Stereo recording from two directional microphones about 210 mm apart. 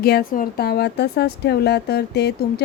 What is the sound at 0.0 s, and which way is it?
Speech, 45° left (ahead or behind).